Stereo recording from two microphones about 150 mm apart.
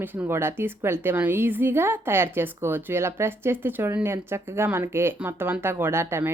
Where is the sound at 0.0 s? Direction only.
15° right (ahead or behind).